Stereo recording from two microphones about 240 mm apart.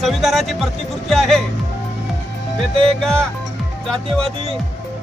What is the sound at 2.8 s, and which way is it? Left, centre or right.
Speech, centre.